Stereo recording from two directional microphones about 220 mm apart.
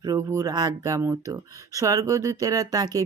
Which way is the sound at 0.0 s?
15° right (ahead or behind).